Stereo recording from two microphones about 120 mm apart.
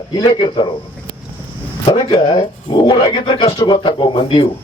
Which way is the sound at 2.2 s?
45° left (ahead or behind).